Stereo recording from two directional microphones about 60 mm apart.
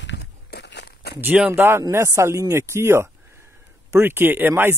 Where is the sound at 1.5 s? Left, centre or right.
Right.